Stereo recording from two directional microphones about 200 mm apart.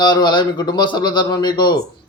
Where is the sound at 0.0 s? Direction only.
20° left (ahead or behind).